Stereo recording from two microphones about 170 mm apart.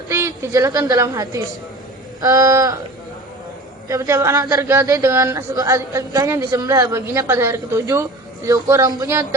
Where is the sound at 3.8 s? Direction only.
20° right (ahead or behind).